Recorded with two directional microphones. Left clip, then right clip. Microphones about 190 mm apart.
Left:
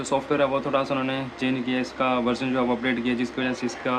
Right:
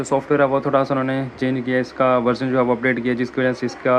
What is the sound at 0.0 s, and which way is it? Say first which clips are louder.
Speech: right 5 dB; 15° right (ahead or behind).